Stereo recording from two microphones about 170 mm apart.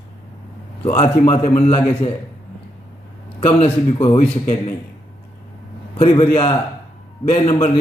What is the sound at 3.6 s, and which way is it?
A man's voice, 35° left (ahead or behind).